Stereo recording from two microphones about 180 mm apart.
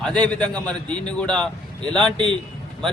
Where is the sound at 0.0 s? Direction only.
5° left (ahead or behind).